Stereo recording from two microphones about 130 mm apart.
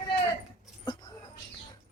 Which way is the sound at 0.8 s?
35° left (ahead or behind).